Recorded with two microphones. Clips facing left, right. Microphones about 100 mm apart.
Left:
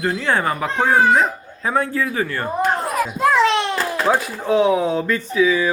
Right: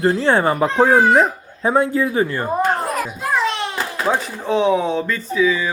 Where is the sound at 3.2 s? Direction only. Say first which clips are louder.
Left 7 dB; 85° left.